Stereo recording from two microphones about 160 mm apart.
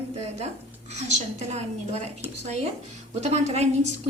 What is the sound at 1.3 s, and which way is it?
A woman's voice, 45° right (ahead or behind).